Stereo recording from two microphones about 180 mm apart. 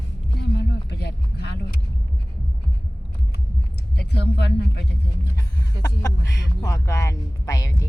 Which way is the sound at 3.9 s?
70° left (ahead or behind).